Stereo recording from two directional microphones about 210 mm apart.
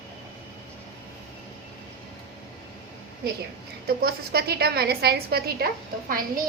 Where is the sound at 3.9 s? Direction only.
50° right (ahead or behind).